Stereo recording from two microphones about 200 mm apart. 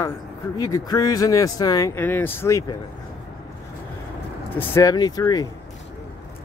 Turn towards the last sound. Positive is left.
turn(degrees=20)  # may be behind; listen again after turning